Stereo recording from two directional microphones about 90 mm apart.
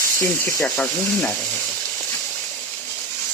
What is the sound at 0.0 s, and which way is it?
Speech, 30° left (ahead or behind).